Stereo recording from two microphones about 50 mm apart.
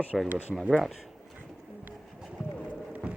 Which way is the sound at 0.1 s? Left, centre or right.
Centre.